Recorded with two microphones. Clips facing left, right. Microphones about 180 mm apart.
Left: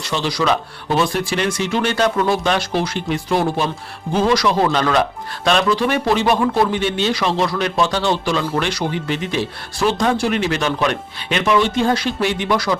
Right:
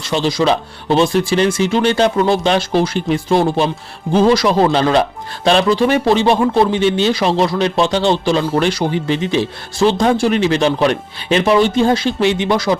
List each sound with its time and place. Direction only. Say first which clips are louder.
0.1 s a man's voice: right 4 dB; 30° right (ahead or behind)